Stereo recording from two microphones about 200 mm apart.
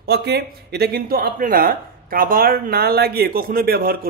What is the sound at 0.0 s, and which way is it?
Speech, 55° right (ahead or behind).